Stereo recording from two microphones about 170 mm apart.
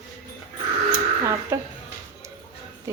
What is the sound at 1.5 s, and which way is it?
Speech, 15° right (ahead or behind).